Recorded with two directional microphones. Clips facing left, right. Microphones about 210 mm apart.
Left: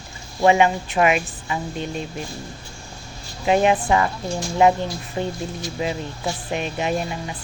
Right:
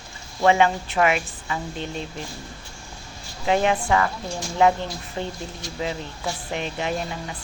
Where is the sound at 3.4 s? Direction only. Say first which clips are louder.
Left 3 dB; 15° left (ahead or behind).